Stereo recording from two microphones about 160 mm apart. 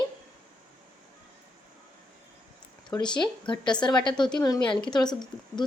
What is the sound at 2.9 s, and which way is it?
A woman's voice, 30° left (ahead or behind).